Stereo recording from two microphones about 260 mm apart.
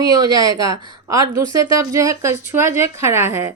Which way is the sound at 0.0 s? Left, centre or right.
Centre.